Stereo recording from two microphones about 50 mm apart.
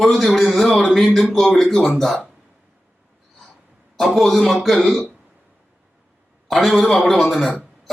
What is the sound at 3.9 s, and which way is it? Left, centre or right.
A man's voice, centre.